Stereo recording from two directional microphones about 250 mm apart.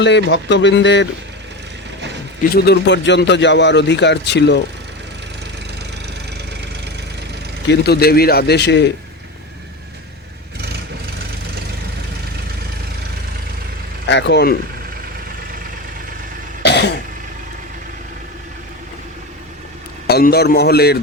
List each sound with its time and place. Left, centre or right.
0.0 s speech: left
2.4 s speech: left
6.5 s engine: right
7.7 s speech: left
14.1 s speech: left
16.6 s cough: left
20.1 s speech: left